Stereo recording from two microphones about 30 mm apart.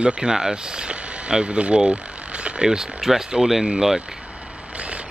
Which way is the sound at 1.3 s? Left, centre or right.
Right.